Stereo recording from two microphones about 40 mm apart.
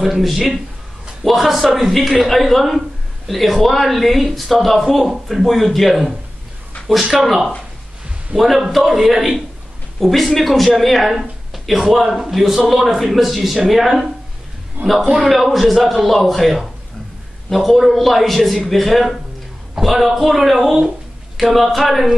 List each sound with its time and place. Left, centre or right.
0.0 s a man's voice: centre
14.8 s a man's voice: right
15.1 s speech: centre